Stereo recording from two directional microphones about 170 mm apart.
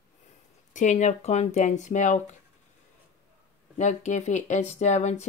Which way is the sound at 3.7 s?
45° left (ahead or behind).